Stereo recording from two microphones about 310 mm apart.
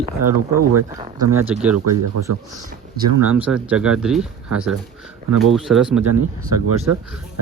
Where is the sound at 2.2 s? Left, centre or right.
Right.